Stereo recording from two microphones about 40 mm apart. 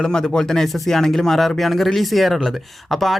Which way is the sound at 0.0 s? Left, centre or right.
Centre.